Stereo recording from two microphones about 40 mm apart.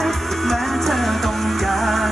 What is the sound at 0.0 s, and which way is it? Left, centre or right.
Music, centre.